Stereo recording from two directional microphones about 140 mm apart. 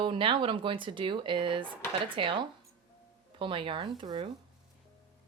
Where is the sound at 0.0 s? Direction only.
35° right (ahead or behind).